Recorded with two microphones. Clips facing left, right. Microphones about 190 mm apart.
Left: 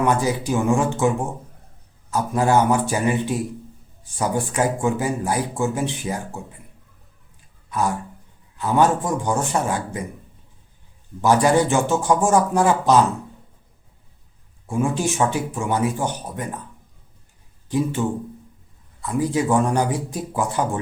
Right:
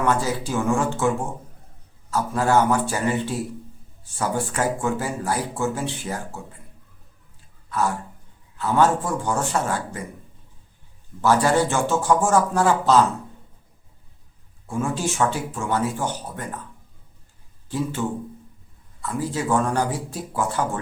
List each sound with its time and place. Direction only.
0.0 s speech: 15° left (ahead or behind)
7.7 s speech: 15° left (ahead or behind)
11.2 s speech: 15° left (ahead or behind)
14.7 s speech: 15° left (ahead or behind)
17.7 s speech: 15° left (ahead or behind)
19.0 s speech: 15° left (ahead or behind)